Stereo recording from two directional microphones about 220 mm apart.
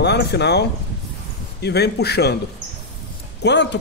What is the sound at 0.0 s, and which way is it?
A man's voice, 50° left (ahead or behind).